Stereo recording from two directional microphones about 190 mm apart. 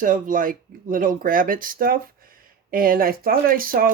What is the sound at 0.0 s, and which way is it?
Speech, 45° right (ahead or behind).